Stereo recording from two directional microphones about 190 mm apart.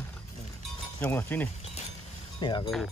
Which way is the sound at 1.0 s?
10° left (ahead or behind).